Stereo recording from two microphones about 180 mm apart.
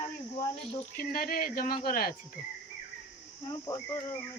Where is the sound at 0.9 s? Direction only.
55° left (ahead or behind).